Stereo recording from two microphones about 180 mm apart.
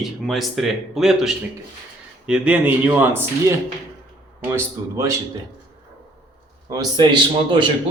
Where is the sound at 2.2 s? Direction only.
5° right (ahead or behind).